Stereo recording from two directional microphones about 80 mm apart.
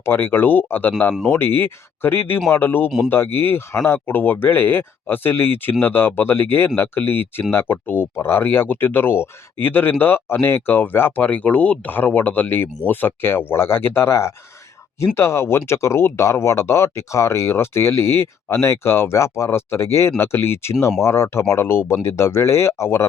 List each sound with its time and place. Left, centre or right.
0.0 s speech: left